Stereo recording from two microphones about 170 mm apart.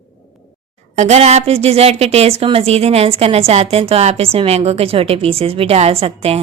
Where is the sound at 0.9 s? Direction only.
40° right (ahead or behind).